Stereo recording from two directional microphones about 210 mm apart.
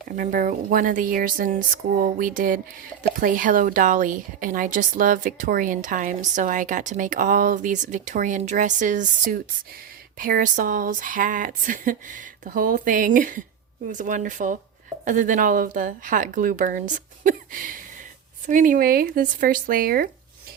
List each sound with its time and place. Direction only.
0.1 s speech: 40° right (ahead or behind)